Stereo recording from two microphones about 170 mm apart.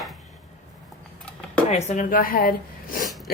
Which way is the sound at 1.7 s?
40° left (ahead or behind).